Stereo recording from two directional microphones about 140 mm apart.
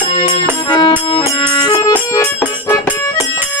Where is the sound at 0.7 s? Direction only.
35° left (ahead or behind).